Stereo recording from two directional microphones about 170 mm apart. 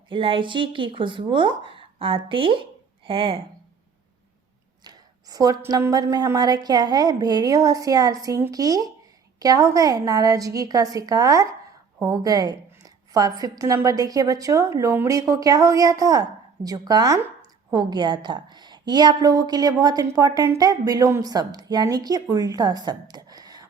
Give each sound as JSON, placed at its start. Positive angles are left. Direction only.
{"t": 0.1, "sound": "speech", "side_deg": -30}
{"t": 4.8, "sound": "a woman's voice", "side_deg": -20}